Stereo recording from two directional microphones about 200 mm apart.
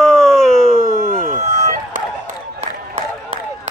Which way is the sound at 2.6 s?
30° right (ahead or behind).